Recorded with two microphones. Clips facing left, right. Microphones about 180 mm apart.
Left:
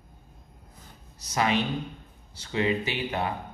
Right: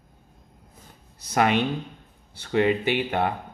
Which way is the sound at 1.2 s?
55° right (ahead or behind).